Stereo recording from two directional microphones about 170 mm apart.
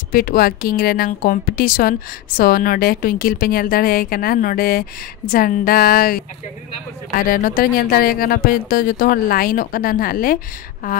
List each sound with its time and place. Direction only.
0.1 s a woman's voice: 55° left (ahead or behind)